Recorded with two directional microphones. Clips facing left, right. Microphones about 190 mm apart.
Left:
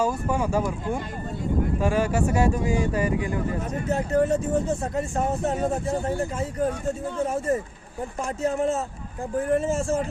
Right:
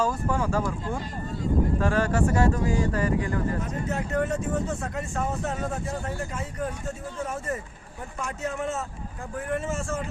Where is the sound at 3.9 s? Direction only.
30° left (ahead or behind).